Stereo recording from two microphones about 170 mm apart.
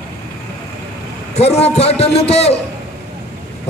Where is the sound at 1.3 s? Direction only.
35° left (ahead or behind).